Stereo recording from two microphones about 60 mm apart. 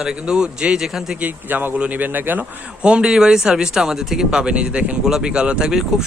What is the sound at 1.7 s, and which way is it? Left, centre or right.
Speech, right.